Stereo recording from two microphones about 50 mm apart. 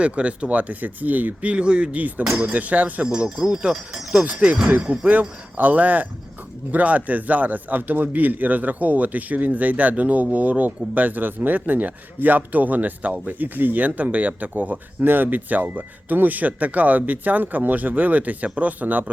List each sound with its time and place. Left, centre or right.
0.0 s speech: right
2.0 s speech: right
3.2 s speech: centre
4.2 s speech: right